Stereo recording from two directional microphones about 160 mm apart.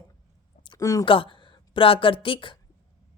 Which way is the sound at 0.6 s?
25° left (ahead or behind).